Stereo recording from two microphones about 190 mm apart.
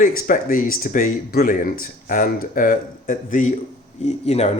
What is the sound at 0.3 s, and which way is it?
Speech, 45° left (ahead or behind).